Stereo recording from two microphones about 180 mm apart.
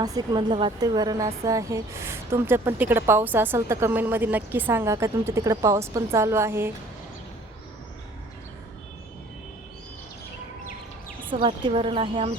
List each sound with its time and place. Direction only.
0.0 s a woman's voice: 20° right (ahead or behind)
11.4 s speech: 30° right (ahead or behind)